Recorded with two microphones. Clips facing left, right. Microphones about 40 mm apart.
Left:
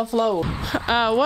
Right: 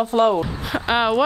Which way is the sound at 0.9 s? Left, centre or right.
Centre.